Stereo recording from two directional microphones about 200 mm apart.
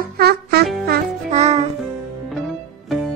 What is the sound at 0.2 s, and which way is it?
Music, 55° right (ahead or behind).